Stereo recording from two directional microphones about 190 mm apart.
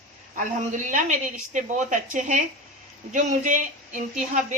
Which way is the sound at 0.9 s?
40° right (ahead or behind).